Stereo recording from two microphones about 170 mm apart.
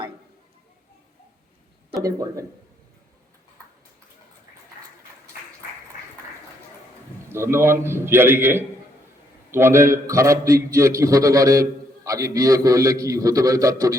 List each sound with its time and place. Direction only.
2.0 s a man's voice: 20° right (ahead or behind)
7.3 s a man's voice: 15° right (ahead or behind)